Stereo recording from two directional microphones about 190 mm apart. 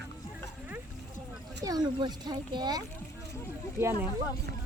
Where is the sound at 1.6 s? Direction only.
20° right (ahead or behind).